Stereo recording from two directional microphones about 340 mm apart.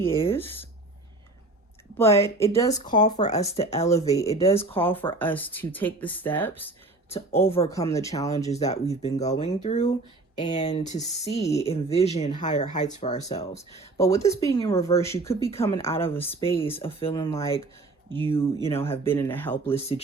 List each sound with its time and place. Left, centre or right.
0.0 s speech: centre
2.0 s speech: centre
4.8 s speech: centre
7.1 s speech: centre